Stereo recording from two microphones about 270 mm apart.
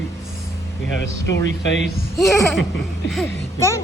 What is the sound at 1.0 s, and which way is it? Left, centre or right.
Speech, left.